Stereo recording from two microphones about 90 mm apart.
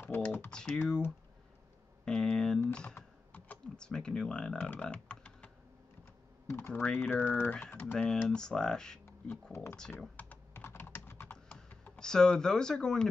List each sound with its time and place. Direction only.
0.0 s typing: 25° left (ahead or behind)
0.5 s speech: 10° left (ahead or behind)
2.0 s a sound: 10° left (ahead or behind)
2.7 s computer keyboard: 10° left (ahead or behind)
6.4 s speech: 25° left (ahead or behind)
6.7 s speech: 10° left (ahead or behind)
7.0 s speech: 25° left (ahead or behind); by 9.0 s 5° left (ahead or behind)
9.0 s speech: 30° left (ahead or behind)
9.8 s typing: 15° left (ahead or behind)
11.5 s speech: 10° left (ahead or behind)